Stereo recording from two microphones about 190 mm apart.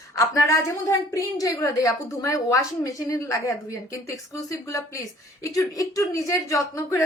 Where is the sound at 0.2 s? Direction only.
15° left (ahead or behind).